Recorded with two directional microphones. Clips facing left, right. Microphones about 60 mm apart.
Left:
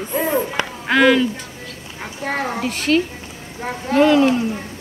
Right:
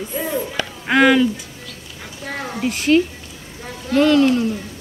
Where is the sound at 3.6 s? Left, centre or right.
Left.